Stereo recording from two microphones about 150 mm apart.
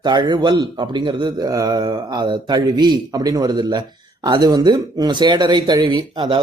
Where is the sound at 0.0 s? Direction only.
30° right (ahead or behind).